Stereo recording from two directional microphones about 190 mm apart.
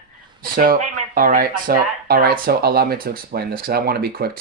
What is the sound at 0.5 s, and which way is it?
Speech, 50° right (ahead or behind).